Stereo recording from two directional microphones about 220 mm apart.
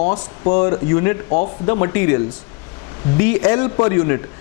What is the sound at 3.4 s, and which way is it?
Speech, 20° left (ahead or behind).